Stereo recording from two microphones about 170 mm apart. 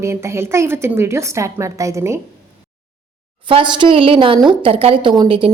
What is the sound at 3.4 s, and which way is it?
A woman's voice, 30° right (ahead or behind).